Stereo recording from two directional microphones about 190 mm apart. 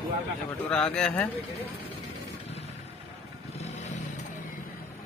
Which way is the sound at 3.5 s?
35° left (ahead or behind).